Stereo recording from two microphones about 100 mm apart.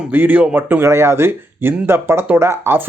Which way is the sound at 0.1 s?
20° right (ahead or behind).